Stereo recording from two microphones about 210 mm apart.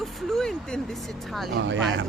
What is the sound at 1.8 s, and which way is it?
Speech, 60° right (ahead or behind).